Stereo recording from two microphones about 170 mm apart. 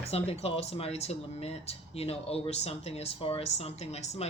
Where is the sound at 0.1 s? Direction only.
35° left (ahead or behind).